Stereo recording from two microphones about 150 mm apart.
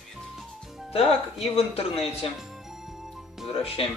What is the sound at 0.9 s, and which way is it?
Speech, 40° left (ahead or behind).